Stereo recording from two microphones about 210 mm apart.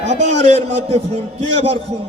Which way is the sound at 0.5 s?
30° right (ahead or behind).